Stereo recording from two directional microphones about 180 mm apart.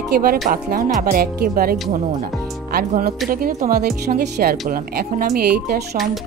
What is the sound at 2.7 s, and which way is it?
Music, 55° right (ahead or behind).